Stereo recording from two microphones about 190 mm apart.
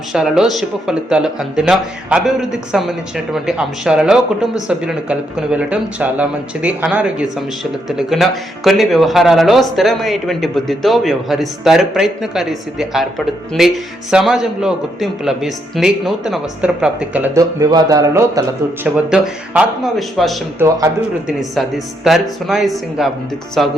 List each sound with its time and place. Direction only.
0.1 s speech: 5° right (ahead or behind)
18.9 s speech: 5° right (ahead or behind)
20.6 s speech: 15° right (ahead or behind)
22.0 s speech: centre (ahead or behind)